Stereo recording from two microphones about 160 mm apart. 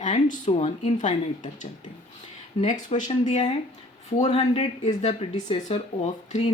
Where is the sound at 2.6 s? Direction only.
50° left (ahead or behind).